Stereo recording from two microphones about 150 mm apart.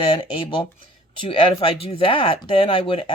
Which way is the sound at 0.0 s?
35° left (ahead or behind).